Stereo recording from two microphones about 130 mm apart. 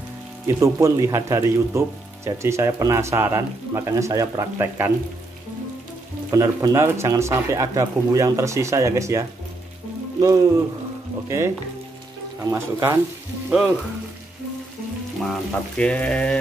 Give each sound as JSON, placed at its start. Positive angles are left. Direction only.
{"t": 0.5, "sound": "speech", "side_deg": -25}
{"t": 6.3, "sound": "speech", "side_deg": -25}
{"t": 10.2, "sound": "speech", "side_deg": -30}
{"t": 13.5, "sound": "frying", "side_deg": -10}
{"t": 15.8, "sound": "speech", "side_deg": 10}